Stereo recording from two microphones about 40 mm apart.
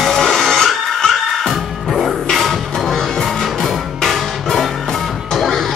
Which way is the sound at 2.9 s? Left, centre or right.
Centre.